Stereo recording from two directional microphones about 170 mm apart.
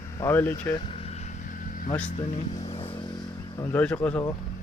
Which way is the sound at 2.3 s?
35° left (ahead or behind).